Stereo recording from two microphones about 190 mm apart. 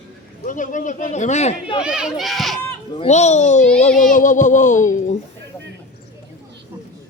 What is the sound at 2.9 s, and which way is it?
Speech, 35° left (ahead or behind).